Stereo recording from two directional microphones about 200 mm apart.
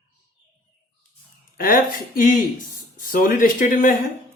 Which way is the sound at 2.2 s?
40° left (ahead or behind).